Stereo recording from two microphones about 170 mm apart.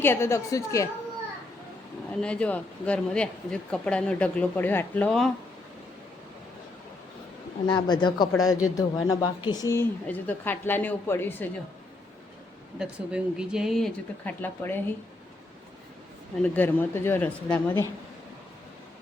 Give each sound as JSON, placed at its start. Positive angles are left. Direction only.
{"t": 0.0, "sound": "speech", "side_deg": 15}
{"t": 2.2, "sound": "speech", "side_deg": 5}
{"t": 7.7, "sound": "speech", "side_deg": 25}
{"t": 12.8, "sound": "speech", "side_deg": -5}
{"t": 16.4, "sound": "speech", "side_deg": 10}